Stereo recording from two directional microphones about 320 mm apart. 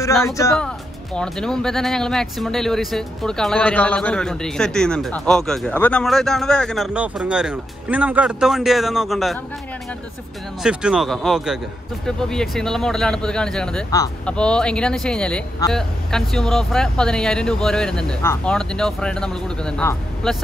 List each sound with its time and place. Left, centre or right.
0.0 s speech: centre
10.6 s speech: centre